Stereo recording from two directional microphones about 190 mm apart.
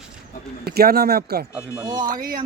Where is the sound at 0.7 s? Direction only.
55° right (ahead or behind).